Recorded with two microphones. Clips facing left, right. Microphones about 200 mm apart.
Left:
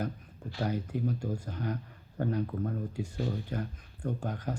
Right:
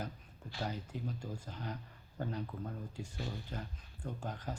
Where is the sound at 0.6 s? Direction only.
55° left (ahead or behind).